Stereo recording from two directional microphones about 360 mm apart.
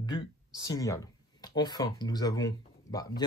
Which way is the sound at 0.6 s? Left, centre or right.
Centre.